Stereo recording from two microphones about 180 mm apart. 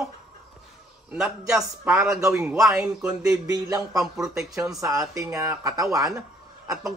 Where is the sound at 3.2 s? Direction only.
20° right (ahead or behind).